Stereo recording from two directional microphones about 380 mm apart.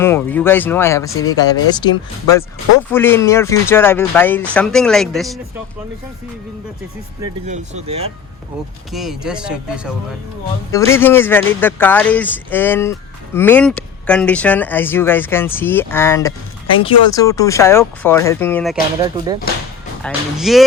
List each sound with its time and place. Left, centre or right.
0.0 s speech: centre
7.4 s speech: centre
8.9 s speech: centre
19.0 s speech: centre